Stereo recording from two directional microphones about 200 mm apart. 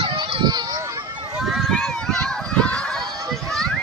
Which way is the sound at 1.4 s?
Centre (ahead or behind).